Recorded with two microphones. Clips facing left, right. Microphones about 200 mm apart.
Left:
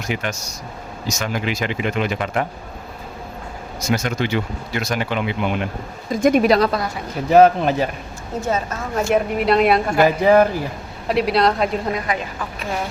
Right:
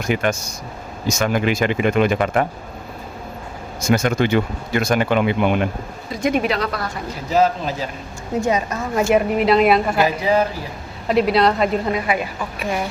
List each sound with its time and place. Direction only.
0.1 s speech: 50° right (ahead or behind)
3.8 s speech: 50° right (ahead or behind)
6.2 s speech: 45° left (ahead or behind)
7.3 s speech: 60° left (ahead or behind)
8.4 s a woman's voice: 15° right (ahead or behind)
9.0 s a woman's voice: centre (ahead or behind)
10.0 s speech: 55° left (ahead or behind)
11.1 s a woman's voice: centre (ahead or behind)